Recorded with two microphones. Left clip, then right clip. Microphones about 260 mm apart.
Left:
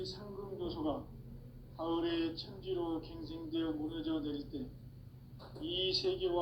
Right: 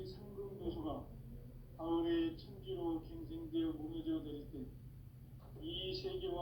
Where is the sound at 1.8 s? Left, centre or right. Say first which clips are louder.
Left 1 dB; left.